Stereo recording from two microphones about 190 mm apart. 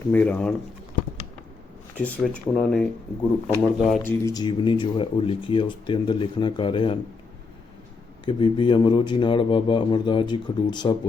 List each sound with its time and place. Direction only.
0.1 s speech: 10° left (ahead or behind)
2.0 s speech: 5° left (ahead or behind)
4.0 s speech: 15° left (ahead or behind)
8.2 s speech: 25° left (ahead or behind)